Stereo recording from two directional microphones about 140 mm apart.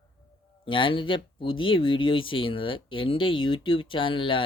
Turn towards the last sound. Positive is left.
turn(degrees=35)  # may be behind; listen again after turning